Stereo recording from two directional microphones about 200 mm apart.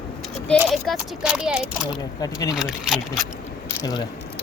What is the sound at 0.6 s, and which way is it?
A child's voice, 5° right (ahead or behind).